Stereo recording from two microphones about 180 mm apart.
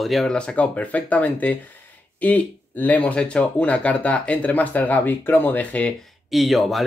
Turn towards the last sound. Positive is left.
turn(degrees=0)  # may be behind; listen again after turning